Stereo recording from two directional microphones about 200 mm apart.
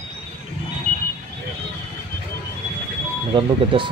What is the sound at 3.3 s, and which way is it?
Speech, 25° right (ahead or behind).